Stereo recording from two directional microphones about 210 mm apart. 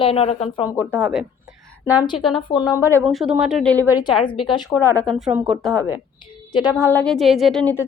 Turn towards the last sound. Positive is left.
turn(degrees=5)  # may be behind; listen again after turning